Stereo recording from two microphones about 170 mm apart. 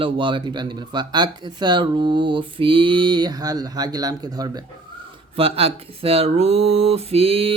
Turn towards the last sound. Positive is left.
turn(degrees=-35)  # may be behind; listen again after turning